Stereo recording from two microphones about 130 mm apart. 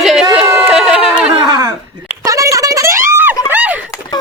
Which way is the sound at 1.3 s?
35° right (ahead or behind).